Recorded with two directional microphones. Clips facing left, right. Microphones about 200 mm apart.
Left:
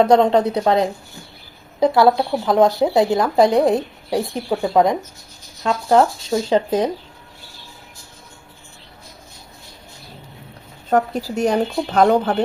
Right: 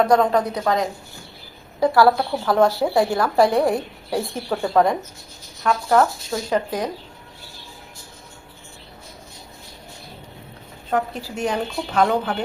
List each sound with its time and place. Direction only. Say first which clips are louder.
0.0 s speech: left 4 dB; 25° left (ahead or behind)
10.8 s speech: left 5 dB; 40° left (ahead or behind)